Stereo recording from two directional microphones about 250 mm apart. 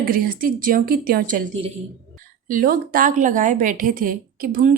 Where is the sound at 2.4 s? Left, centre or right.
Right.